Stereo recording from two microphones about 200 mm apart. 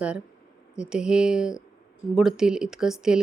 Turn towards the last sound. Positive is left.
turn(degrees=-5)  # may be behind; listen again after turning